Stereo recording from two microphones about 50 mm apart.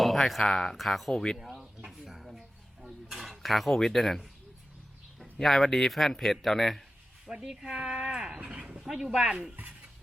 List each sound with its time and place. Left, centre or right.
0.0 s speech: centre
1.4 s a sound: centre
3.1 s speech: centre
7.3 s speech: centre
8.4 s a sound: right
8.8 s speech: centre
9.6 s dishes: right